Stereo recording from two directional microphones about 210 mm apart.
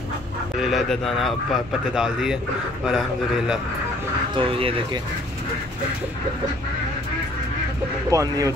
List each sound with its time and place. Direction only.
0.6 s speech: centre (ahead or behind)
4.4 s speech: 25° right (ahead or behind)
8.1 s speech: 15° right (ahead or behind)